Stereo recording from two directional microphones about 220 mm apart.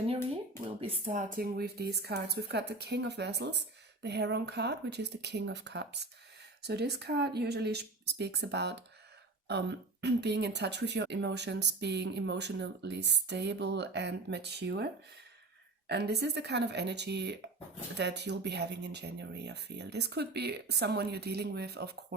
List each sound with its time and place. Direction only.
0.8 s speech: 35° right (ahead or behind); by 14.8 s 50° right (ahead or behind)
15.9 s speech: 50° right (ahead or behind)